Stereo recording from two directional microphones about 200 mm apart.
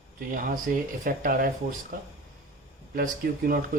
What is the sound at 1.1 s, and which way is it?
Speech, 45° right (ahead or behind).